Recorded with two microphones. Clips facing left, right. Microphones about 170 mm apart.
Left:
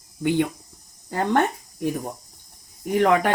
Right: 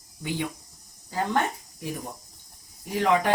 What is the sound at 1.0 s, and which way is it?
Speech, 55° left (ahead or behind).